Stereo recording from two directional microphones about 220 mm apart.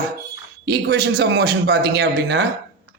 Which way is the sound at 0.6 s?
50° right (ahead or behind).